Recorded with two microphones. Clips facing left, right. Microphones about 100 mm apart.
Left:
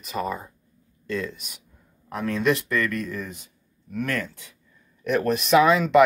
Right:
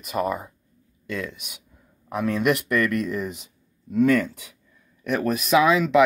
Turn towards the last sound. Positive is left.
turn(degrees=0)  # may be behind; listen again after turning